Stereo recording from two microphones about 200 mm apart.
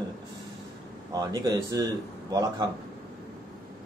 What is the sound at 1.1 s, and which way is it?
Speech, 20° right (ahead or behind).